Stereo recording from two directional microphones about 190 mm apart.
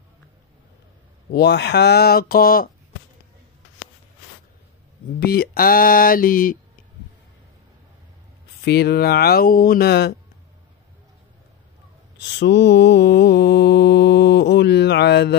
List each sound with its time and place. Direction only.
1.3 s mantra: 60° left (ahead or behind)
5.2 s speech: 55° left (ahead or behind)
8.6 s mantra: 55° left (ahead or behind)
12.4 s mantra: 65° left (ahead or behind)